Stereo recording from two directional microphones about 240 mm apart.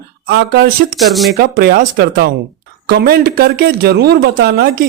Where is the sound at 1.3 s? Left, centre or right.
Right.